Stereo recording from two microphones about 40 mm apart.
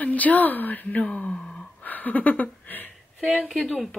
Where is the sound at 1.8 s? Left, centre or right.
Left.